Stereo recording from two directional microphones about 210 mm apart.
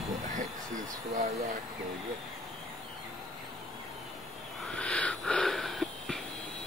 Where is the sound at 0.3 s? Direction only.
40° right (ahead or behind).